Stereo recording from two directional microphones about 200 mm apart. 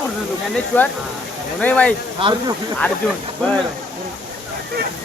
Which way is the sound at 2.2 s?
25° right (ahead or behind).